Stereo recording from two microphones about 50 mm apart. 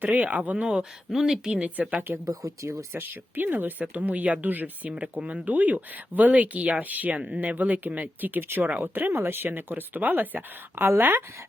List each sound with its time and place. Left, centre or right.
0.0 s speech: right
0.5 s speech: centre
1.5 s a woman's voice: right
2.1 s speech: right
2.9 s speech: right